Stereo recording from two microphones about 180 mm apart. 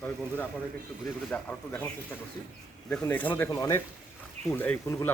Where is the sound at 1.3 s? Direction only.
10° left (ahead or behind).